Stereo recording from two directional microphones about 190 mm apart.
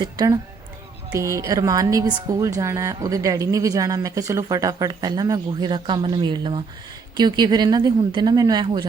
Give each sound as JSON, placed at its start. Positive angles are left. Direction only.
{"t": 0.0, "sound": "a woman's voice", "side_deg": -20}